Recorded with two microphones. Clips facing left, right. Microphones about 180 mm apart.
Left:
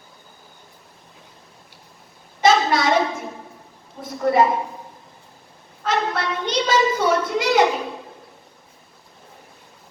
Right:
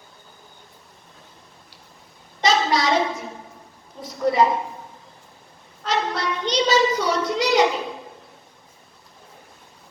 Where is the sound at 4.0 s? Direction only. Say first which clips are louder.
Left 2 dB; 55° left (ahead or behind).